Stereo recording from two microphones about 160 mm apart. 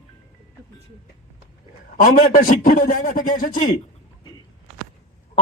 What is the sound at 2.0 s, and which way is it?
A man's voice, 65° left (ahead or behind).